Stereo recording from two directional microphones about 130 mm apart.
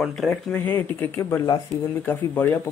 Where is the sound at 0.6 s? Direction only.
15° left (ahead or behind).